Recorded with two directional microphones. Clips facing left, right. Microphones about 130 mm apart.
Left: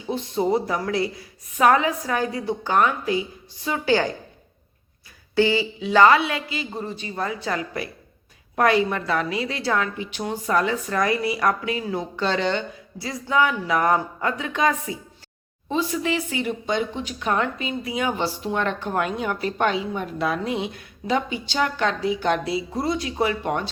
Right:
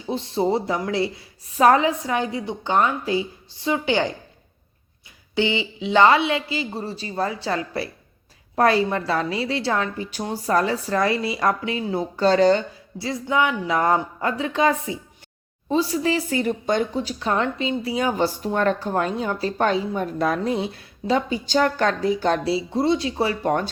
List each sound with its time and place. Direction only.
0.1 s a woman's voice: 30° right (ahead or behind)
5.3 s a woman's voice: 20° right (ahead or behind)
12.1 s speech: 40° right (ahead or behind)
13.0 s a woman's voice: 25° right (ahead or behind)